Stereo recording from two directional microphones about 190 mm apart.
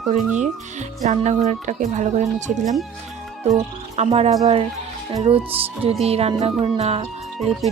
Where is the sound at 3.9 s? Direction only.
30° right (ahead or behind).